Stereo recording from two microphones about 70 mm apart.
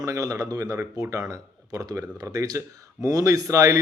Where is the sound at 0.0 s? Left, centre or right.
Right.